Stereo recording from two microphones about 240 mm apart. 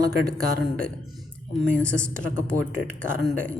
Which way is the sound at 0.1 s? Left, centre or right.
Right.